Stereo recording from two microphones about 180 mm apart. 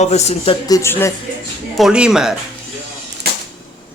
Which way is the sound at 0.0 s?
35° left (ahead or behind).